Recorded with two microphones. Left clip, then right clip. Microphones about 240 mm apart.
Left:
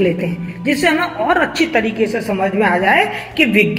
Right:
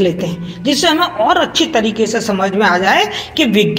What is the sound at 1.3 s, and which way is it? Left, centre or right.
A woman's voice, right.